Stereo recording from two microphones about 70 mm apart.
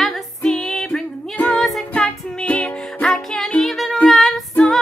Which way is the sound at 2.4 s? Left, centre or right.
Centre.